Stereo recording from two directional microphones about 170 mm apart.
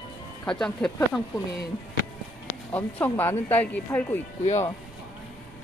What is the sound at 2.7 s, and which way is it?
Speech, 10° left (ahead or behind).